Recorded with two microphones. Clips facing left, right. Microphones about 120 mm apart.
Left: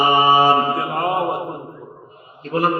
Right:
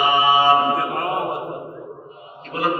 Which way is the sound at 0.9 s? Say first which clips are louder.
Left 3 dB; 30° left (ahead or behind).